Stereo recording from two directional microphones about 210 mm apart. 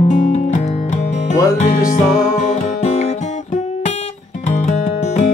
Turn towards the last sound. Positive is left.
turn(degrees=35)  # may be behind; listen again after turning